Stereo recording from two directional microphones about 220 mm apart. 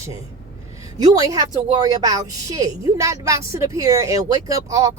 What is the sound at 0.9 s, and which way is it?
A woman's voice, 15° right (ahead or behind).